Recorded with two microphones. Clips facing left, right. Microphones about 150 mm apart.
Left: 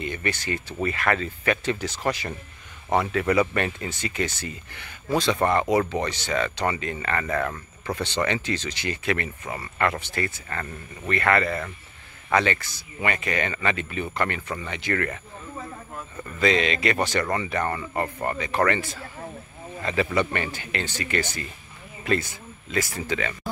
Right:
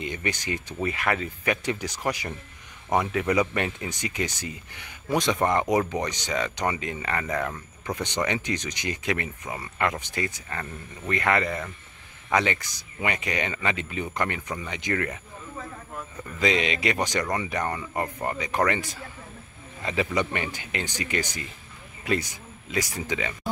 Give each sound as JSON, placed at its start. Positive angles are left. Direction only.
{"t": 0.0, "sound": "speech", "side_deg": -15}
{"t": 16.3, "sound": "speech", "side_deg": -15}